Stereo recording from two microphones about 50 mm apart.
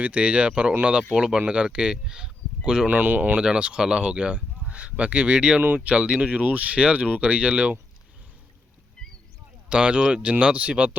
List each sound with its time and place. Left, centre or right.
0.0 s speech: right
2.9 s speech: right
3.3 s speech: right
9.0 s rowboat: centre
9.6 s speech: right